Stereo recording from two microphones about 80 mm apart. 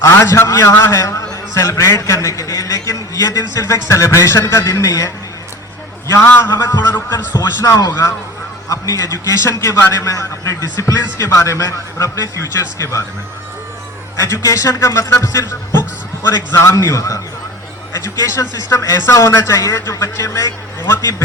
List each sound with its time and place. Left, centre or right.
0.0 s a man's voice: left
6.4 s a man's voice: left
14.2 s a man's voice: left